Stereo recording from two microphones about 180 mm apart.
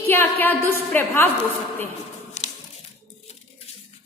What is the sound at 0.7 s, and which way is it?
Speech, 10° left (ahead or behind).